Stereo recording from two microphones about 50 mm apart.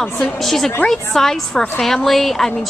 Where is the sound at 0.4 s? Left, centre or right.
Centre.